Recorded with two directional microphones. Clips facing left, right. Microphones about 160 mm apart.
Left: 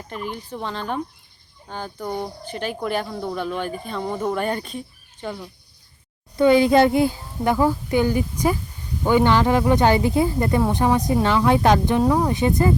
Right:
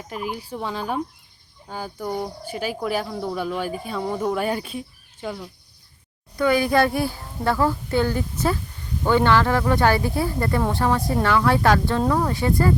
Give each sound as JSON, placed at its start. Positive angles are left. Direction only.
{"t": 0.1, "sound": "speech", "side_deg": -5}
{"t": 6.3, "sound": "a child's voice", "side_deg": 20}